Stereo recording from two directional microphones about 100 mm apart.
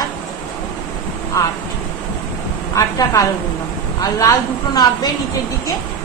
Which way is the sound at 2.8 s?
35° left (ahead or behind).